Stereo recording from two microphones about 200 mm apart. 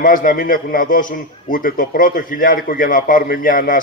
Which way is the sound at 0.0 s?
45° left (ahead or behind).